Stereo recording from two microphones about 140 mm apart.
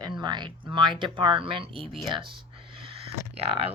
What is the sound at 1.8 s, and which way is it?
Speech, centre (ahead or behind).